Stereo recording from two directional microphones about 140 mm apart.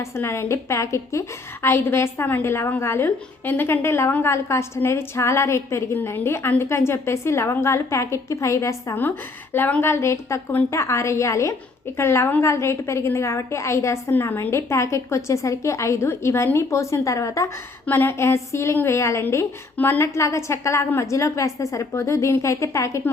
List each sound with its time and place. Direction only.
0.0 s a woman's voice: 20° left (ahead or behind)